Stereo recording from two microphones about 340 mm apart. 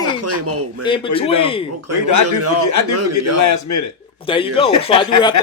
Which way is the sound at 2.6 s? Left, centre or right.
Left.